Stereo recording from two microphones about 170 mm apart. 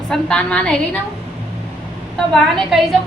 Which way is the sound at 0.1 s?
5° left (ahead or behind).